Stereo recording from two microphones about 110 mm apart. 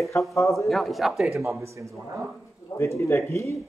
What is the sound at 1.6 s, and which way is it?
Speech, 25° right (ahead or behind).